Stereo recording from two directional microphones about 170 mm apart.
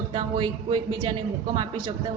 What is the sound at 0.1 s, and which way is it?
A woman's voice, 25° right (ahead or behind).